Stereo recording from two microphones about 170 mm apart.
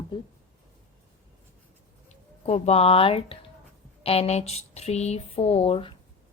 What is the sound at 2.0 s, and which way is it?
A woman's voice, 40° left (ahead or behind).